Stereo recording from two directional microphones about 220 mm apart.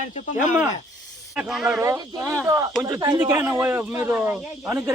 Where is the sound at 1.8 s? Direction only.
15° right (ahead or behind).